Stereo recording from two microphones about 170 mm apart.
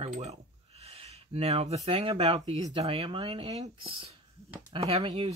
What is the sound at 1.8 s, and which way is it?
Speech, 35° right (ahead or behind).